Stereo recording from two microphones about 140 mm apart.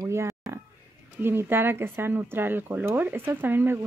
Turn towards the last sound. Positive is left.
turn(degrees=-15)  # may be behind; listen again after turning